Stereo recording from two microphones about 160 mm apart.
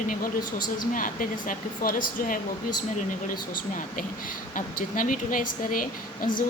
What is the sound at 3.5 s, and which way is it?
Speech, 60° left (ahead or behind).